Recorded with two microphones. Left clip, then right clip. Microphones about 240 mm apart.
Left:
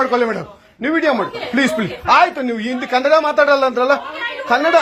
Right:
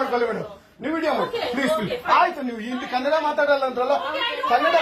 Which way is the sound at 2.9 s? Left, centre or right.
Left.